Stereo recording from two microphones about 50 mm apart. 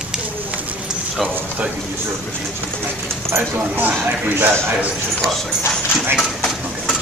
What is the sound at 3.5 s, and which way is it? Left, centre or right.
A man's voice, right.